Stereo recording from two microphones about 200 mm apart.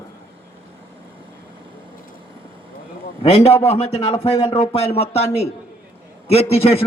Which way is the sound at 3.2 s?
30° left (ahead or behind).